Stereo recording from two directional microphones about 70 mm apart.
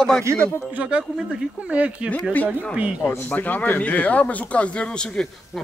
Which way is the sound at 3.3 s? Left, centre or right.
Left.